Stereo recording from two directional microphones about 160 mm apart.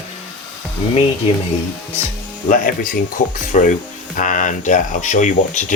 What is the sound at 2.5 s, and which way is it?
Speech, 60° left (ahead or behind).